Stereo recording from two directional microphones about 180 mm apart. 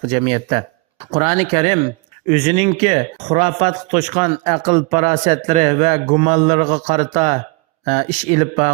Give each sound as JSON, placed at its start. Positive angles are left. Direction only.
{"t": 0.1, "sound": "speech", "side_deg": -35}